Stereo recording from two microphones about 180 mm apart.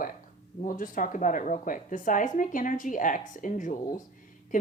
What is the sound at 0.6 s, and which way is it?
A woman's voice, 50° left (ahead or behind).